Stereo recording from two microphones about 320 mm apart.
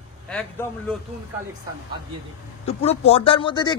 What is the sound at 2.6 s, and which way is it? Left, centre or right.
Speech, centre.